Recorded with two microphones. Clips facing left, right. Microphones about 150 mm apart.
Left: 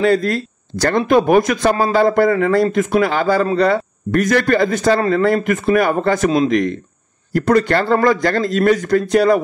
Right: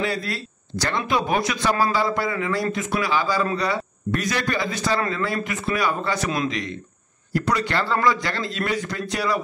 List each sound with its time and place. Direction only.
0.0 s speech: 50° left (ahead or behind)
7.3 s speech: 50° left (ahead or behind)